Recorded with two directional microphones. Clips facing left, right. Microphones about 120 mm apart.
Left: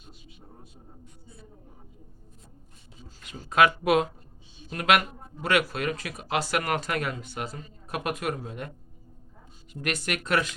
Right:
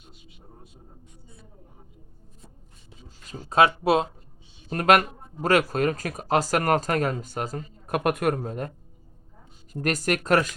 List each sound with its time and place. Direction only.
3.2 s speech: 30° right (ahead or behind)
4.7 s speech: 45° right (ahead or behind)
9.8 s speech: 40° right (ahead or behind)